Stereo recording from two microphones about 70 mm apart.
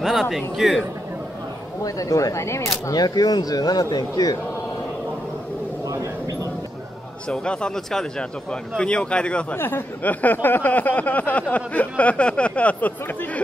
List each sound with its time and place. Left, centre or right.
0.0 s a man's voice: centre
1.8 s speech: left
2.9 s a man's voice: left
7.2 s speech: centre
9.6 s a sound: left